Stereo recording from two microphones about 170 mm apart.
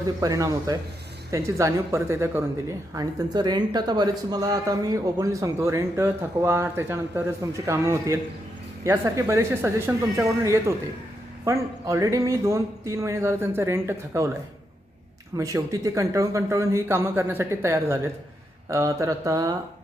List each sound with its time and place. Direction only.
0.2 s speech: 20° right (ahead or behind)
15.4 s speech: 20° right (ahead or behind)